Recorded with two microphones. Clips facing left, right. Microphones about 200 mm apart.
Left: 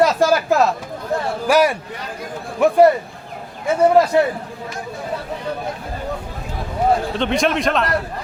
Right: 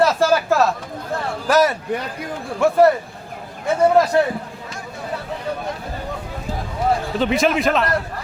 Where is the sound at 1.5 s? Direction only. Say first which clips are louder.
Even; 10° left (ahead or behind).